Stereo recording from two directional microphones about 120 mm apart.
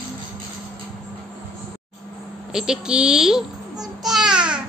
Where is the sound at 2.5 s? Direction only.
5° right (ahead or behind).